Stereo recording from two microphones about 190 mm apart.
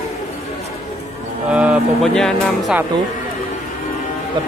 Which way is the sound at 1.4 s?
5° right (ahead or behind).